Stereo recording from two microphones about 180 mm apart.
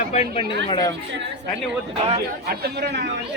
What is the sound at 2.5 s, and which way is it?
Speech, 60° right (ahead or behind).